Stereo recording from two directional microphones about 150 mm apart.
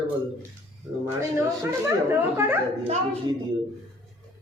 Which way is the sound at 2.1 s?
15° right (ahead or behind).